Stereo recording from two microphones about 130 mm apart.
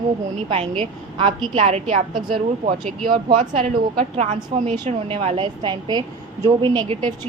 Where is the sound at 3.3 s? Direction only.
80° right.